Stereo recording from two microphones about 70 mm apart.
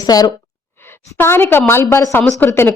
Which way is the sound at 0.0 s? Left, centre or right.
Left.